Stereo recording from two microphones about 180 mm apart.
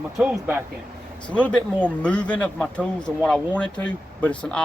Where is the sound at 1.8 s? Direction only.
5° left (ahead or behind).